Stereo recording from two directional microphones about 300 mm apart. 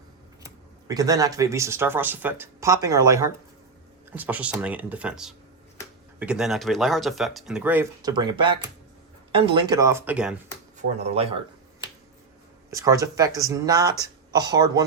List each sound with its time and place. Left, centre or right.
0.4 s speech: centre
10.8 s speech: centre
12.7 s speech: centre